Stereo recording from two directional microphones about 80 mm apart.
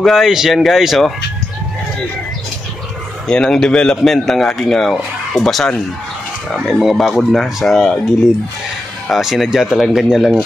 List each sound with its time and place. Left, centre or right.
0.0 s a man's voice: centre
3.3 s a man's voice: centre
9.1 s a man's voice: centre